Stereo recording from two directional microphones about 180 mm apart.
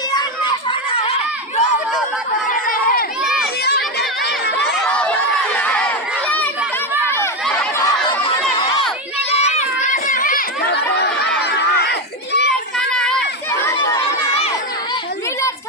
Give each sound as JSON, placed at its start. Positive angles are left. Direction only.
{"t": 0.1, "sound": "a sound", "side_deg": 25}
{"t": 2.5, "sound": "crowd", "side_deg": 50}
{"t": 3.2, "sound": "children playing", "side_deg": 0}
{"t": 3.6, "sound": "crowd", "side_deg": 60}
{"t": 4.6, "sound": "chatter", "side_deg": 5}
{"t": 5.5, "sound": "crowd", "side_deg": 10}
{"t": 7.0, "sound": "chatter", "side_deg": 15}
{"t": 7.4, "sound": "a sound", "side_deg": 5}
{"t": 7.8, "sound": "chatter", "side_deg": 25}
{"t": 9.1, "sound": "a sound", "side_deg": 35}
{"t": 12.9, "sound": "children playing", "side_deg": 5}
{"t": 13.5, "sound": "crowd", "side_deg": 15}